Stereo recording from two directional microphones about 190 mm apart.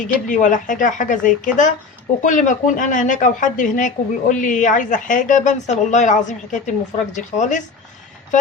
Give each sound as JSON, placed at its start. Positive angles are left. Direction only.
{"t": 0.3, "sound": "a woman's voice", "side_deg": 40}